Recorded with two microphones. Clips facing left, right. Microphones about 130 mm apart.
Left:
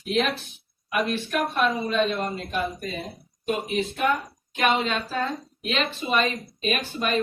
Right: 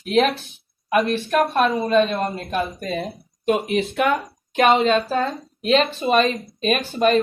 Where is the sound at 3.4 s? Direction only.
85° right.